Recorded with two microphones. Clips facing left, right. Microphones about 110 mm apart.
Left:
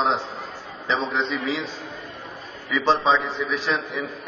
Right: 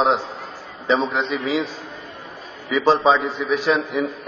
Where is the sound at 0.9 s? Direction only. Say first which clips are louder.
Right 4 dB; 10° right (ahead or behind).